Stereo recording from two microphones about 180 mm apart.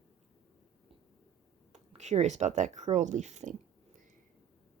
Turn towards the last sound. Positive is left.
turn(degrees=-40)  # may be behind; listen again after turning